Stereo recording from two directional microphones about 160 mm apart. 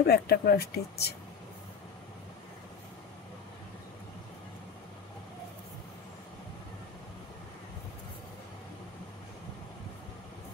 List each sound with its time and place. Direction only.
0.0 s speech: 80° left